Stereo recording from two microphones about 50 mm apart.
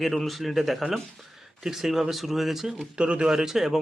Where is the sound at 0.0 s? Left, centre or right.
Centre.